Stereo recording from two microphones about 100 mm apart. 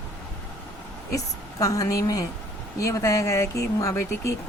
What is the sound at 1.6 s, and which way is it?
Speech, 35° left (ahead or behind).